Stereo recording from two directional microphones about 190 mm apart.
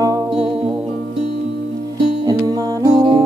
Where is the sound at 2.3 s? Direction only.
20° right (ahead or behind).